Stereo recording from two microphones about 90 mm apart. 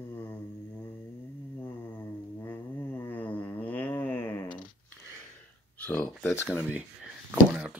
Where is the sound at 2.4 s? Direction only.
25° left (ahead or behind).